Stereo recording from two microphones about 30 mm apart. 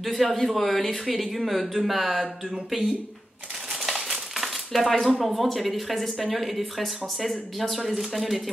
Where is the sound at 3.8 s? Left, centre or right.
Centre.